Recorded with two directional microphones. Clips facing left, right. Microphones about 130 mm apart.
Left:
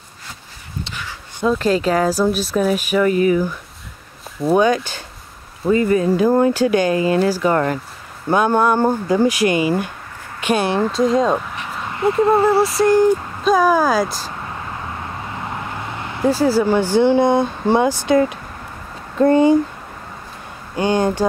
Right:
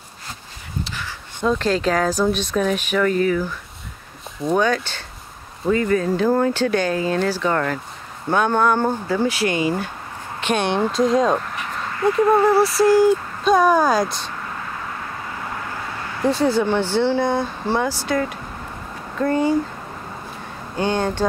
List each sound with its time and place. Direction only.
1.4 s speech: 5° left (ahead or behind)
11.9 s speech: 25° left (ahead or behind)
13.4 s speech: centre (ahead or behind)
15.4 s vehicle: 20° left (ahead or behind)
16.3 s speech: 5° left (ahead or behind); by 19.5 s 20° left (ahead or behind)
20.7 s speech: 10° left (ahead or behind)